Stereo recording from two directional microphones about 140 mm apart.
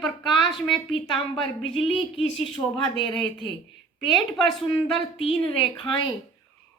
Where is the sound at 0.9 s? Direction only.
Centre (ahead or behind).